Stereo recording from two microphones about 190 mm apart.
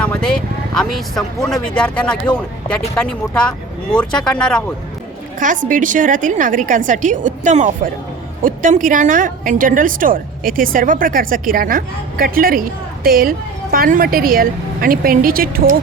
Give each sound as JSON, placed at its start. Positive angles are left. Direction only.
{"t": 0.0, "sound": "vehicle", "side_deg": 5}
{"t": 0.8, "sound": "speech", "side_deg": 0}
{"t": 5.6, "sound": "a woman's voice", "side_deg": -45}
{"t": 8.4, "sound": "music", "side_deg": -45}
{"t": 8.9, "sound": "a woman's voice", "side_deg": -45}